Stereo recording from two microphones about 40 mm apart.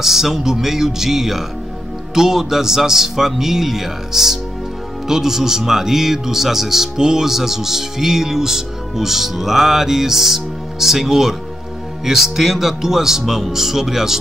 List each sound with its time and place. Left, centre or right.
0.0 s a man's voice: centre